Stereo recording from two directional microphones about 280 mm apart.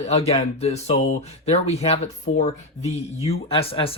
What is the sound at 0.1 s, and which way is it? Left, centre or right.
Speech, left.